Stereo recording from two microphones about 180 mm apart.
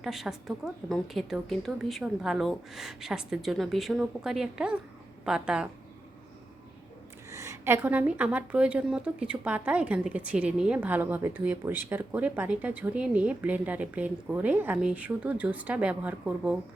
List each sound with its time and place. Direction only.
0.0 s a woman's voice: centre (ahead or behind)
7.3 s a woman's voice: 15° right (ahead or behind)